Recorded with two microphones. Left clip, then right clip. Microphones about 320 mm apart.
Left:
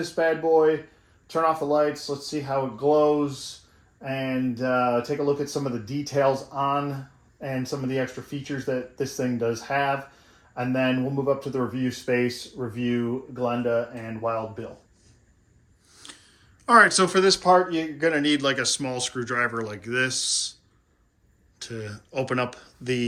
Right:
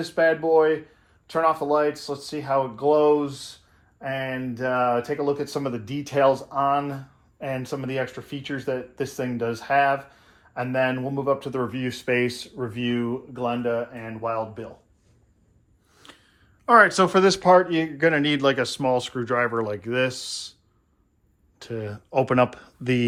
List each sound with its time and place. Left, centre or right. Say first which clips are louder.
0.4 s speech: right 1 dB; right
4.0 s speech: even; right
15.9 s speech: left 3 dB; centre
21.6 s speech: right 3 dB; centre